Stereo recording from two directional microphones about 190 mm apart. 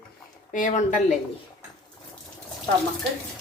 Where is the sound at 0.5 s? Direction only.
40° left (ahead or behind).